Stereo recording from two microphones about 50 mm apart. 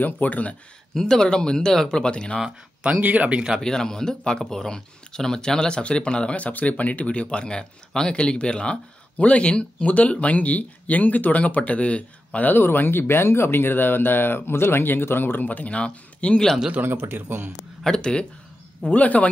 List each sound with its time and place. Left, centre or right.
0.0 s speech: left
0.9 s speech: centre
3.0 s speech: right
3.6 s speech: centre
12.4 s speech: left
16.8 s a man's voice: right
17.8 s speech: centre
18.9 s speech: left